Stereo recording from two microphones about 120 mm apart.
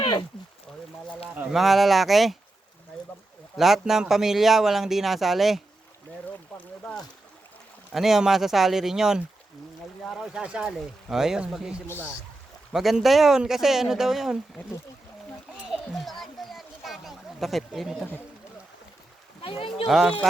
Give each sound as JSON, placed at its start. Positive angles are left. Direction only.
{"t": 0.0, "sound": "a sound", "side_deg": 35}
{"t": 1.5, "sound": "speech", "side_deg": 0}
{"t": 3.6, "sound": "speech", "side_deg": -5}
{"t": 6.5, "sound": "boat", "side_deg": 10}
{"t": 7.9, "sound": "speech", "side_deg": -5}
{"t": 15.5, "sound": "a sound", "side_deg": -5}
{"t": 19.4, "sound": "speech", "side_deg": 50}